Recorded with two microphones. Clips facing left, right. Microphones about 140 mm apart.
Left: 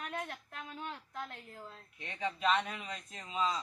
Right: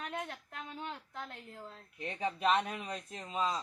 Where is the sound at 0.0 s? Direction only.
20° right (ahead or behind).